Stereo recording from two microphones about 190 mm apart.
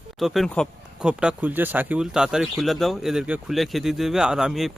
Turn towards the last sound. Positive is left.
turn(degrees=0)  # may be behind; listen again after turning